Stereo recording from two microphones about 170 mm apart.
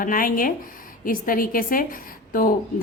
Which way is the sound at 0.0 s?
55° left (ahead or behind).